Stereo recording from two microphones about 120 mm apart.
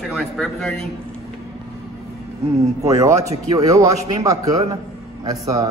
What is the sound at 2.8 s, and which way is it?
A man's voice, 30° right (ahead or behind).